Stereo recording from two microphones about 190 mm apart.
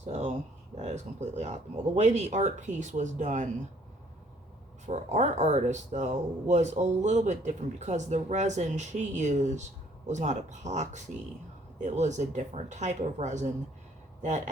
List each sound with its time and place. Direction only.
0.0 s a sound: 35° right (ahead or behind)
0.8 s speech: 35° right (ahead or behind)
4.9 s speech: 40° right (ahead or behind)